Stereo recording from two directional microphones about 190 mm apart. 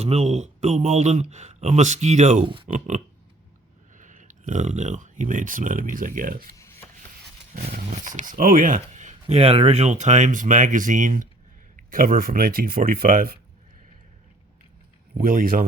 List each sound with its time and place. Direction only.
0.0 s speech: 35° right (ahead or behind)
6.6 s rub: 15° left (ahead or behind)
8.0 s speech: 45° right (ahead or behind)
15.2 s speech: 50° right (ahead or behind)